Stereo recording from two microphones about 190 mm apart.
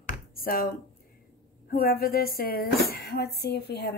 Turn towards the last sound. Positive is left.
turn(degrees=60)  # may be behind; listen again after turning